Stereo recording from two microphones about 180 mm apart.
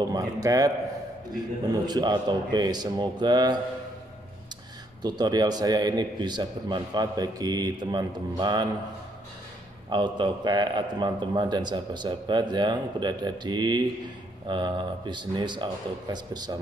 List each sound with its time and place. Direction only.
0.1 s a man's voice: 20° right (ahead or behind)
1.9 s a man's voice: 25° right (ahead or behind)
5.0 s a man's voice: 25° right (ahead or behind)
9.8 s a man's voice: 25° right (ahead or behind)